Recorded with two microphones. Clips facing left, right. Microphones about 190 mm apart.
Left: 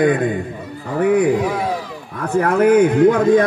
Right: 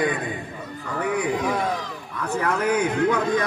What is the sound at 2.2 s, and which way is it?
A man's voice, 50° left (ahead or behind).